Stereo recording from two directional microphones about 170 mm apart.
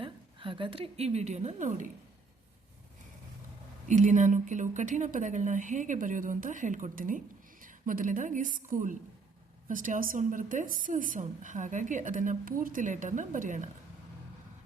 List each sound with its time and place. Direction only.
0.0 s a woman's voice: 30° right (ahead or behind); by 1.9 s 45° right (ahead or behind)
3.8 s a woman's voice: 45° right (ahead or behind)